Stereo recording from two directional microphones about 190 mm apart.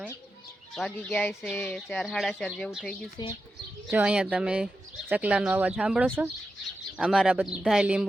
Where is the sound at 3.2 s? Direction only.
20° left (ahead or behind).